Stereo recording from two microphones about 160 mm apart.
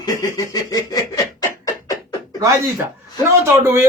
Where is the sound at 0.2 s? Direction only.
25° left (ahead or behind).